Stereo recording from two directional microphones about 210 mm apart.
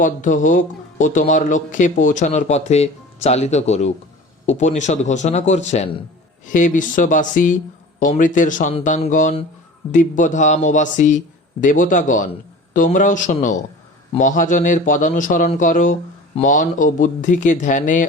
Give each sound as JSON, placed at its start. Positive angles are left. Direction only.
{"t": 0.0, "sound": "speech", "side_deg": 40}